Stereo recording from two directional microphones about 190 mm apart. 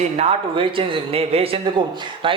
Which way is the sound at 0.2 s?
30° right (ahead or behind).